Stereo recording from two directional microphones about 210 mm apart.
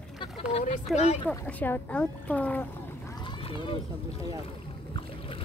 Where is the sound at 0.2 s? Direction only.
25° left (ahead or behind).